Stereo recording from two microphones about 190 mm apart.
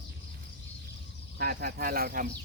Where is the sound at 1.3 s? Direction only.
50° right (ahead or behind).